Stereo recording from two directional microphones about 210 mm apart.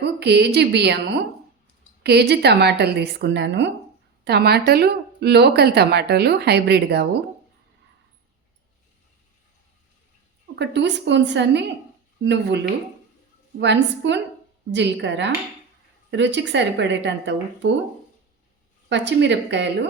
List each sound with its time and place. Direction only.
0.2 s speech: 55° right (ahead or behind)
10.5 s a woman's voice: 55° right (ahead or behind)
18.9 s a woman's voice: 60° right (ahead or behind)